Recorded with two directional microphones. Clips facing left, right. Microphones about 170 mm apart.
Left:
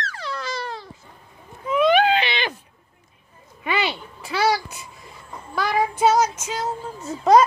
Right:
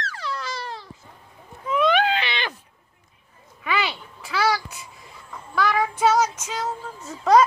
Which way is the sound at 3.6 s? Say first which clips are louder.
Left 2 dB; 25° left (ahead or behind).